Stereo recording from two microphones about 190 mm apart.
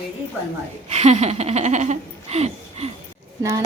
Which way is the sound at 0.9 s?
35° right (ahead or behind).